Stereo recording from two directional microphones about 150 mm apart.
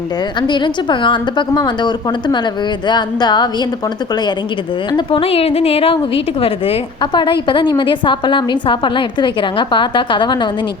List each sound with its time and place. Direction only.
0.3 s a woman's voice: 30° left (ahead or behind)
4.9 s a woman's voice: 35° left (ahead or behind)